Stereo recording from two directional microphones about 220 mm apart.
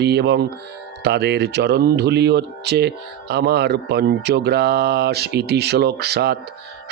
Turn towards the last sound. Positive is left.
turn(degrees=-50)  # may be behind; listen again after turning